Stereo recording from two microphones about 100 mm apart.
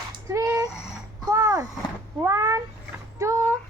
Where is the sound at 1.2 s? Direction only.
35° right (ahead or behind).